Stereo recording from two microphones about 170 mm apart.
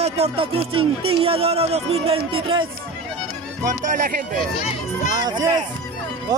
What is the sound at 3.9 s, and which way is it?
Speech, 55° right (ahead or behind).